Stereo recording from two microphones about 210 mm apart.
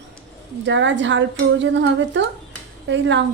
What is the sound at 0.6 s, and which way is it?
A woman's voice, 60° right (ahead or behind).